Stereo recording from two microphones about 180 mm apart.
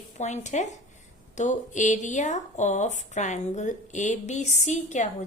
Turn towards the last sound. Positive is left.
turn(degrees=40)  # may be behind; listen again after turning